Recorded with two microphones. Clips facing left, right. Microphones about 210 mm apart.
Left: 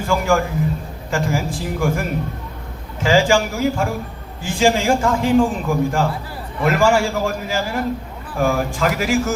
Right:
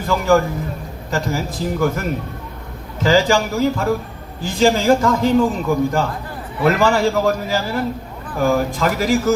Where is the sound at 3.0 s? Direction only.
40° right (ahead or behind).